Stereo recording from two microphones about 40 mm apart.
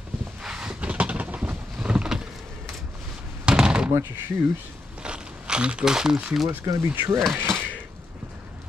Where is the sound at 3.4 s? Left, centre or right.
Right.